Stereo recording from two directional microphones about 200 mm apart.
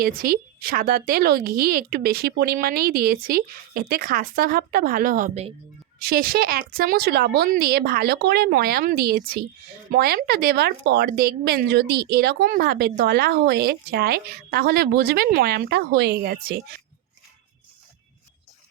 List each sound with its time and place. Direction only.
0.0 s speech: 45° right (ahead or behind)
6.0 s speech: 50° right (ahead or behind)